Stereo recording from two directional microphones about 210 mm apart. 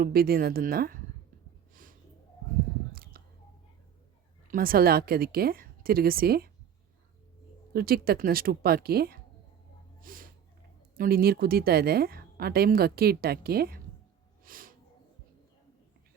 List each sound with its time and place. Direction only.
0.0 s a woman's voice: 45° right (ahead or behind)
1.7 s a sound: 40° right (ahead or behind)
2.9 s whispering: 45° right (ahead or behind)
4.5 s a woman's voice: 45° right (ahead or behind)
7.7 s a woman's voice: 45° right (ahead or behind)
10.0 s a sound: 40° right (ahead or behind)
10.9 s a woman's voice: 45° right (ahead or behind)
14.4 s snort: 40° right (ahead or behind)